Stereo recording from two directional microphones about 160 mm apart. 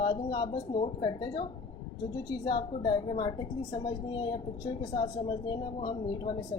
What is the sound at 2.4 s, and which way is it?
A woman's voice, 30° left (ahead or behind).